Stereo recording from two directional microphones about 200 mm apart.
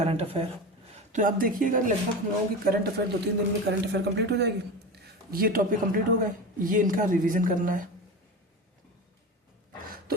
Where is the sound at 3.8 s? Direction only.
60° right (ahead or behind).